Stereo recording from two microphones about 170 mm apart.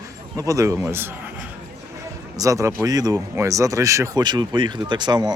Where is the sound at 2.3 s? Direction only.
20° right (ahead or behind).